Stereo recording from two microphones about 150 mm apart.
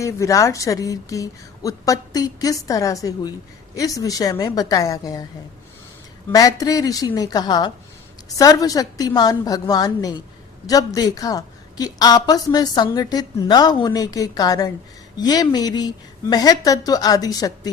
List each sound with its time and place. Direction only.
0.0 s a woman's voice: 20° left (ahead or behind)
6.3 s a woman's voice: 25° left (ahead or behind)